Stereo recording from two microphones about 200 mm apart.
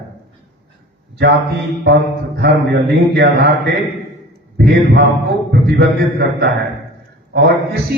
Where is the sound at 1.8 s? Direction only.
55° right (ahead or behind).